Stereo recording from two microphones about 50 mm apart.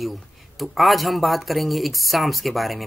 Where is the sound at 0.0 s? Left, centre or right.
Centre.